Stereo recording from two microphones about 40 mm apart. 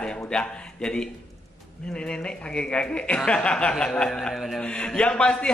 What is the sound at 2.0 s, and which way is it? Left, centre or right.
Speech, left.